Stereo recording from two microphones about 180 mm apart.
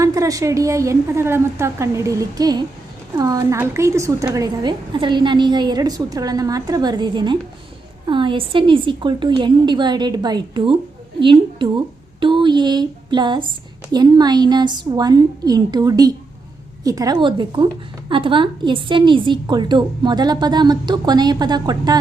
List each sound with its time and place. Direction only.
0.0 s a woman's voice: 20° right (ahead or behind)